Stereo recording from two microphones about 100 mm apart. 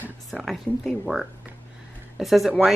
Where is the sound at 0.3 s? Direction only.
Centre (ahead or behind).